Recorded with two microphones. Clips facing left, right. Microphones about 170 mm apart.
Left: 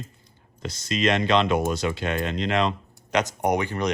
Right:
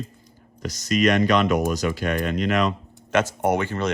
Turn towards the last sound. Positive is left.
turn(degrees=15)  # may be behind; listen again after turning